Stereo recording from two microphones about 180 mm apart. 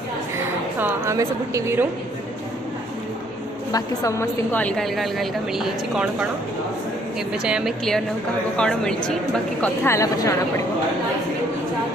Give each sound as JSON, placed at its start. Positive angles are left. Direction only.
{"t": 0.4, "sound": "a woman's voice", "side_deg": -10}
{"t": 3.7, "sound": "a woman's voice", "side_deg": 20}
{"t": 7.4, "sound": "a woman's voice", "side_deg": -5}
{"t": 9.8, "sound": "speech", "side_deg": 20}